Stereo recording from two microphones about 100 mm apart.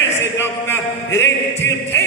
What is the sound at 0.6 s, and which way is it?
A man's voice, 25° left (ahead or behind).